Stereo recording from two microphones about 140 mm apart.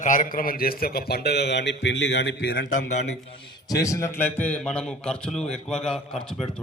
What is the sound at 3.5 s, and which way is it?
A man's voice, 30° left (ahead or behind).